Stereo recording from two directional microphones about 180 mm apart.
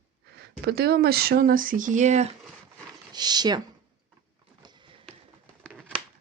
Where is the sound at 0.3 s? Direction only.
65° right (ahead or behind); by 2.3 s 40° right (ahead or behind).